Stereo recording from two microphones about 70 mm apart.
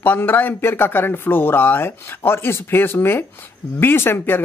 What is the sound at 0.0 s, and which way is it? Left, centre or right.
Speech, left.